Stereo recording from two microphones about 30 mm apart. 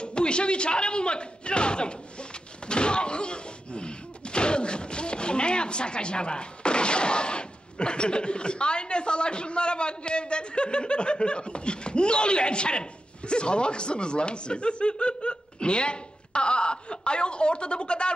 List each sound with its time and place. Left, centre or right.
0.0 s speech: left